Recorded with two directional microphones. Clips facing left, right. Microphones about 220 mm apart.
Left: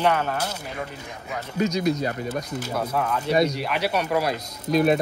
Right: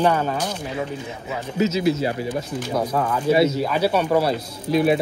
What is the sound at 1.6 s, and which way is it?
Speech, 5° right (ahead or behind).